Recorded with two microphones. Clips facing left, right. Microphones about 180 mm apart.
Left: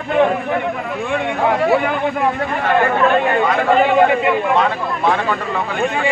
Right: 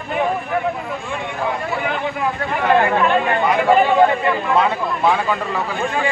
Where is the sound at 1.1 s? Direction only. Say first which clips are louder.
Left 7 dB; 65° left (ahead or behind).